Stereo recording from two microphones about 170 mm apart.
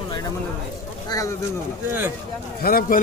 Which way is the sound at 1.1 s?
20° left (ahead or behind).